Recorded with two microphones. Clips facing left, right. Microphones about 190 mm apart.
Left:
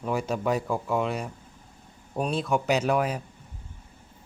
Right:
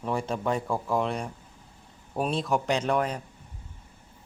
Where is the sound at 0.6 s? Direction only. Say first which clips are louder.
Even; centre (ahead or behind).